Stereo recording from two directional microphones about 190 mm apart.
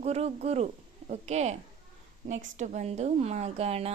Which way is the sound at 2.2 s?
40° right (ahead or behind).